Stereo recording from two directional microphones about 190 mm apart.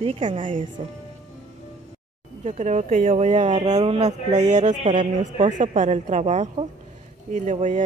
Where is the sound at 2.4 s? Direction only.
40° right (ahead or behind).